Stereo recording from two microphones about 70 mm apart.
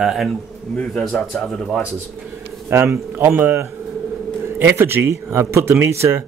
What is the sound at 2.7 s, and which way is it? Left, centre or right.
Speech, right.